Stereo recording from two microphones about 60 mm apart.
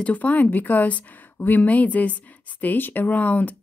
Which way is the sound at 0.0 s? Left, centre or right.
Left.